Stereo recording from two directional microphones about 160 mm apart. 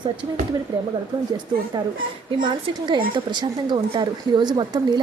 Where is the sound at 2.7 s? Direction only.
25° right (ahead or behind).